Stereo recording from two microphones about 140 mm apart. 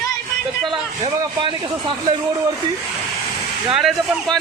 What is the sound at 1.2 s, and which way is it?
Speech, 35° right (ahead or behind).